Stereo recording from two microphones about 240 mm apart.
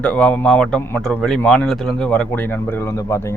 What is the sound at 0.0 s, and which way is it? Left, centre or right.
A man's voice, centre.